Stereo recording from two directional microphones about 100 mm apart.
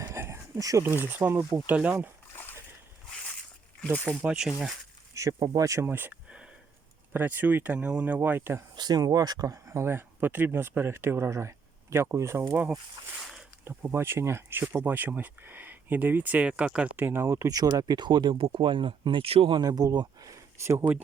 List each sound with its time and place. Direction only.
0.0 s a sound: 25° right (ahead or behind)
0.9 s speech: 20° right (ahead or behind)
2.3 s splash: 20° left (ahead or behind)
4.2 s speech: 10° right (ahead or behind)
5.1 s speech: 30° right (ahead or behind)
8.7 s speech: 45° right (ahead or behind); by 12.5 s 25° right (ahead or behind)
13.7 s speech: 25° right (ahead or behind)
17.2 s speech: 35° right (ahead or behind); by 18.3 s 50° right (ahead or behind)
18.3 s speech: 65° right (ahead or behind)
19.5 s speech: 40° right (ahead or behind)